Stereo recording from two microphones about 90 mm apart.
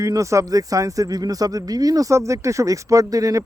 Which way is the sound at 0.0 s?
35° right (ahead or behind).